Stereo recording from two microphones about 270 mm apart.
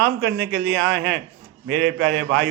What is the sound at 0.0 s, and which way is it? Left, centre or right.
A man's voice, right.